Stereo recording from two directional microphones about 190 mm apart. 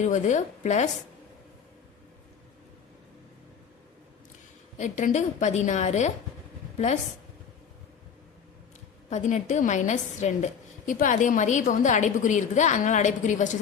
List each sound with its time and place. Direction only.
0.0 s a woman's voice: 40° left (ahead or behind)
4.8 s a woman's voice: 40° left (ahead or behind)
9.0 s a woman's voice: 40° left (ahead or behind)